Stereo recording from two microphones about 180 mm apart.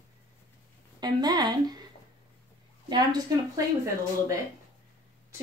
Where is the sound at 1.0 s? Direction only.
20° right (ahead or behind).